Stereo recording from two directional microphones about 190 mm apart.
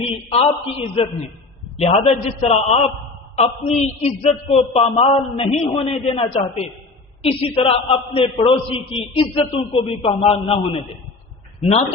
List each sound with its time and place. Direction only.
0.3 s a man's voice: 30° left (ahead or behind)